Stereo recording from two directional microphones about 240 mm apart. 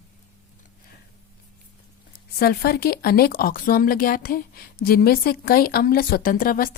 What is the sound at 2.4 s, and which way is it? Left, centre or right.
Speech, left.